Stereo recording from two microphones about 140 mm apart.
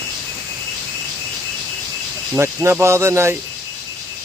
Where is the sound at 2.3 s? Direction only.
20° right (ahead or behind).